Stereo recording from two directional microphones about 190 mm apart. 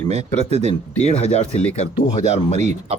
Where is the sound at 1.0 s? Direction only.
35° left (ahead or behind).